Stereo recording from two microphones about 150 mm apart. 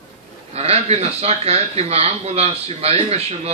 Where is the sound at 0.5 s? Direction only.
45° right (ahead or behind).